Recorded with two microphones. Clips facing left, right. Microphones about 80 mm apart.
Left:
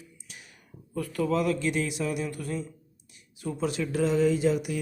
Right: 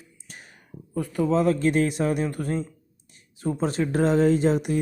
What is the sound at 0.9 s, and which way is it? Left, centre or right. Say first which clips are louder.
Speech: right 4 dB; right.